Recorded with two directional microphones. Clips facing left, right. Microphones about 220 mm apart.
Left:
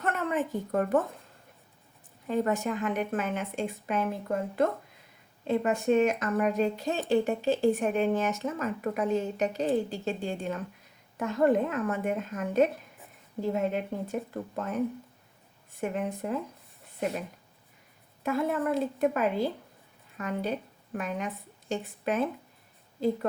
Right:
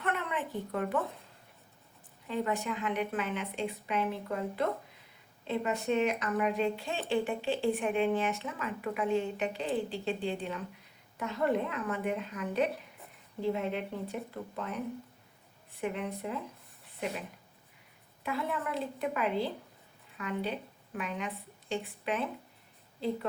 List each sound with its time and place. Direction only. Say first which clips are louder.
0.0 s a woman's voice: left 5 dB; 45° left (ahead or behind)
2.2 s speech: left 5 dB; 45° left (ahead or behind)
18.2 s a woman's voice: left 7 dB; 45° left (ahead or behind)